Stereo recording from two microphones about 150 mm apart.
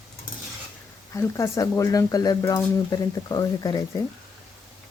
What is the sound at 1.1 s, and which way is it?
Speech, 20° left (ahead or behind).